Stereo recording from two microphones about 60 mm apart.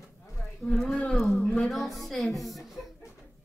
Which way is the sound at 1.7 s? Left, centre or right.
Centre.